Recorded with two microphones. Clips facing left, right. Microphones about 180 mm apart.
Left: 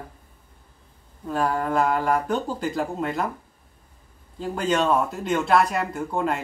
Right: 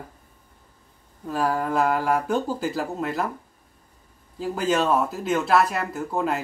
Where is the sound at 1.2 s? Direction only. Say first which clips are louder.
Even; 5° right (ahead or behind).